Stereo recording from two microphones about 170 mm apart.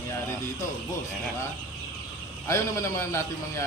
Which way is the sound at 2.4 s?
20° left (ahead or behind).